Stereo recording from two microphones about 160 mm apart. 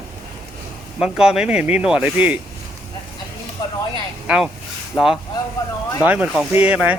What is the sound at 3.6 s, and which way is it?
Speech, 25° left (ahead or behind).